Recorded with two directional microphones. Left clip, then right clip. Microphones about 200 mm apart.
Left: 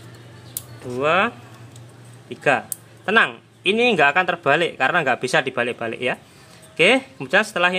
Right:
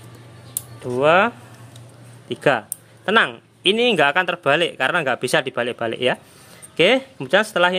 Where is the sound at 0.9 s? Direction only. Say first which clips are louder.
Right 3 dB; 30° right (ahead or behind).